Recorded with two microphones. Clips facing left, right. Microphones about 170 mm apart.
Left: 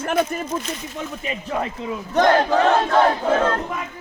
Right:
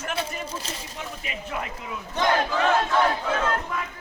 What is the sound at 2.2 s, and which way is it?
Battle cry, 55° left (ahead or behind).